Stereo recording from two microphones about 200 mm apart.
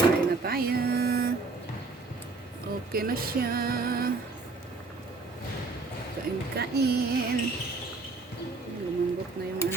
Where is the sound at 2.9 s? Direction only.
50° right (ahead or behind).